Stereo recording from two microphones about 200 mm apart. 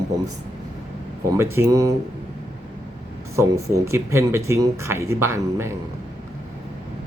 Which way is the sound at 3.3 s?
15° right (ahead or behind).